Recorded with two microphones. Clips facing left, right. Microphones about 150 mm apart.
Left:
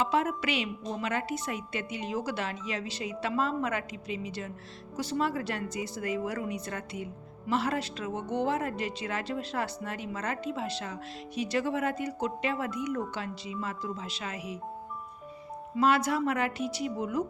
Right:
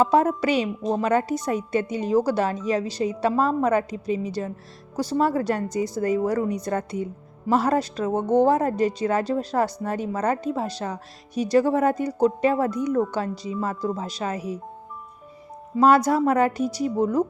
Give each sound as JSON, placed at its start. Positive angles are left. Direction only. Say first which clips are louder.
{"t": 0.0, "sound": "speech", "louder": "right 9 dB", "side_deg": -40}
{"t": 15.8, "sound": "speech", "louder": "right 8 dB", "side_deg": -40}